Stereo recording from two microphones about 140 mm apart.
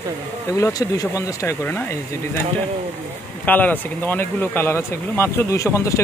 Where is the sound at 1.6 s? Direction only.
15° left (ahead or behind).